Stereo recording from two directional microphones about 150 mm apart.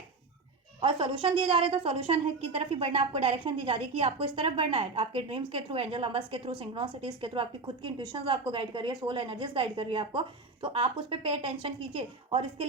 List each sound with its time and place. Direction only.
0.8 s a woman's voice: 35° right (ahead or behind)